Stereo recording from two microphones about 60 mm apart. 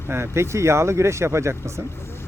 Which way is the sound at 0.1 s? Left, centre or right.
Right.